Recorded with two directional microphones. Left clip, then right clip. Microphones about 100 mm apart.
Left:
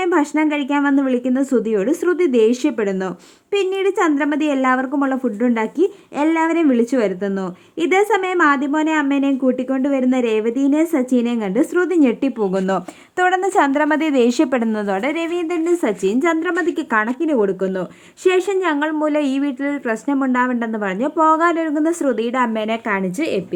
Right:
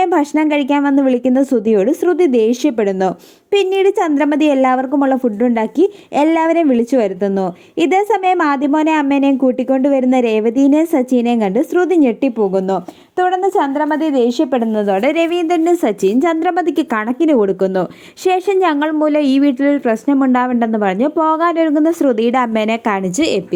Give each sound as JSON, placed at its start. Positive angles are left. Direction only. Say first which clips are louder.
{"t": 0.0, "sound": "a woman's voice", "louder": "right 3 dB", "side_deg": -40}
{"t": 12.6, "sound": "a woman's voice", "louder": "right 2 dB", "side_deg": 5}
{"t": 15.0, "sound": "a woman's voice", "louder": "right 7 dB", "side_deg": -55}